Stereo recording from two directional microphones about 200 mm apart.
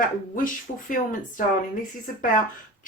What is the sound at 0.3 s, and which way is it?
Speech, 40° left (ahead or behind).